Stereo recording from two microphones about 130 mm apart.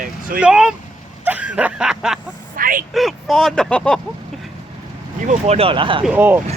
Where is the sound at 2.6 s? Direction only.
90° right.